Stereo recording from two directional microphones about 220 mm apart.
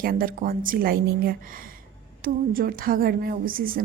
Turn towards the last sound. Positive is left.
turn(degrees=-40)  # may be behind; listen again after turning